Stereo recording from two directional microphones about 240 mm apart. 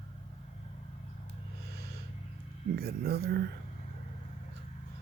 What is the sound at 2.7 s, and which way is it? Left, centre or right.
Speech, right.